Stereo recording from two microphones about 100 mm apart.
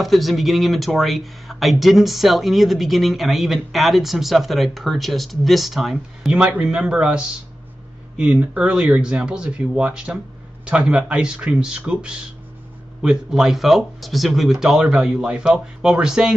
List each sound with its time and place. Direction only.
0.0 s speech: centre (ahead or behind)